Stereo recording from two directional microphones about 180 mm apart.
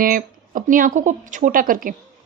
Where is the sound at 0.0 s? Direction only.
50° right (ahead or behind).